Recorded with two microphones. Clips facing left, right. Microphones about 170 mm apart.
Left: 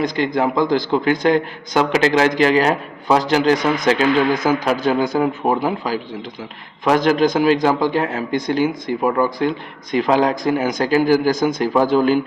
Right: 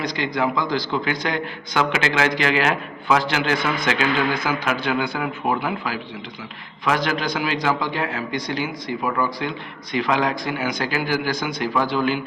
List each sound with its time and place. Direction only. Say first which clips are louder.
0.0 s a man's voice: left 5 dB; 45° left (ahead or behind)